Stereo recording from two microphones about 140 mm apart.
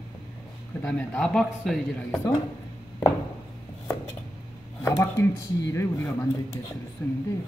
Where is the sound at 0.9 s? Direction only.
5° left (ahead or behind).